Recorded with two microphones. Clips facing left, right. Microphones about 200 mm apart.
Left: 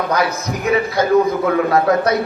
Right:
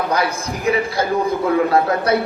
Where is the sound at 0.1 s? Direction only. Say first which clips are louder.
Left 2 dB; 30° right (ahead or behind).